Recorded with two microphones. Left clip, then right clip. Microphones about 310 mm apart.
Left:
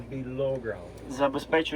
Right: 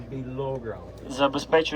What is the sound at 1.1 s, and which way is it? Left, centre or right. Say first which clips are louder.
Speech: right 4 dB; right.